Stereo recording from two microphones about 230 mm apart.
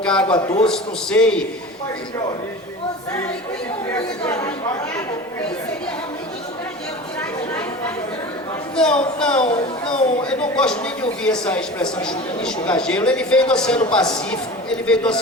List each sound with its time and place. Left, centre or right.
0.0 s a man's voice: centre
0.3 s a man's voice: left
0.7 s speech: centre
3.9 s speech: centre
8.7 s speech: centre